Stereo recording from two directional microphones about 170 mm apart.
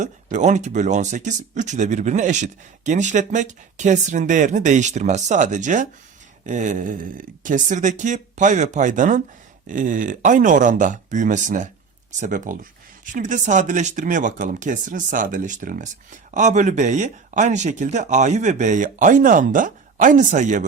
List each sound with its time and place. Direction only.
0.0 s speech: 45° right (ahead or behind)